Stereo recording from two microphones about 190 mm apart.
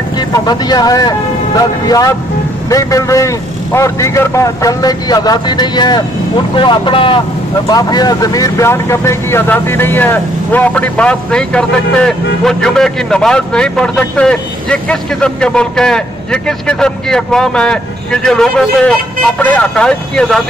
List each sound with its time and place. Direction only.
0.3 s a man's voice: 20° left (ahead or behind); by 20.4 s 5° left (ahead or behind)